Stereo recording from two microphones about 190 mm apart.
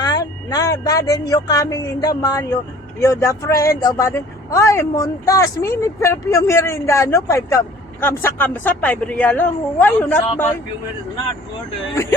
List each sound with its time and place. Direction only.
0.0 s speech: 20° left (ahead or behind)